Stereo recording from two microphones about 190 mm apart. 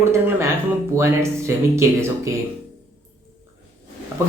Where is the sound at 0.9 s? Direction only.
15° right (ahead or behind).